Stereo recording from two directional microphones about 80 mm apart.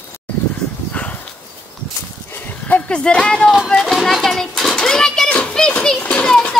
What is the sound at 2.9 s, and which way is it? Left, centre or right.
Speech, centre.